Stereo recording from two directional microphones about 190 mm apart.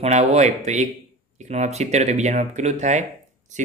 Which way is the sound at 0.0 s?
35° right (ahead or behind).